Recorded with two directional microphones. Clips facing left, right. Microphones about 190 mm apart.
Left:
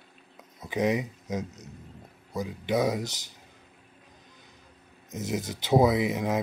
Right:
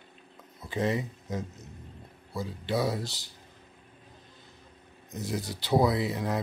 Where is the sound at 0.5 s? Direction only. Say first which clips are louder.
Left 3 dB; 15° left (ahead or behind).